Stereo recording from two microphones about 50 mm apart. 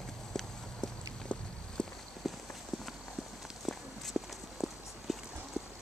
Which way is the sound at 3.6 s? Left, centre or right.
Centre.